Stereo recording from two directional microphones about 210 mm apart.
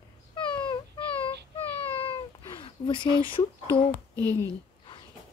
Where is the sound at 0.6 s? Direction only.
20° left (ahead or behind).